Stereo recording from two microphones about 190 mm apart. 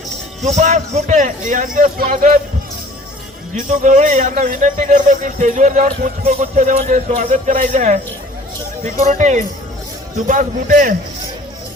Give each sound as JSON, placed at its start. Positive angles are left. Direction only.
{"t": 0.4, "sound": "a man's voice", "side_deg": -35}
{"t": 3.5, "sound": "a man's voice", "side_deg": -40}
{"t": 9.0, "sound": "a man's voice", "side_deg": -40}